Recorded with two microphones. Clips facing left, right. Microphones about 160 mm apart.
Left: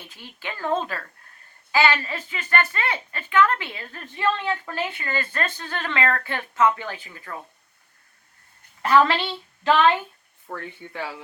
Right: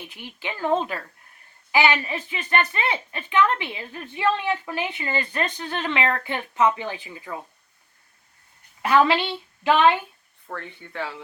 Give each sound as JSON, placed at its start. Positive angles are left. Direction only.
{"t": 0.1, "sound": "speech", "side_deg": -15}
{"t": 8.8, "sound": "a woman's voice", "side_deg": -15}
{"t": 10.5, "sound": "speech", "side_deg": 10}